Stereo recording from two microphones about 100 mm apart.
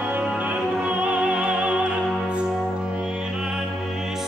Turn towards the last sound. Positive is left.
turn(degrees=-5)  # may be behind; listen again after turning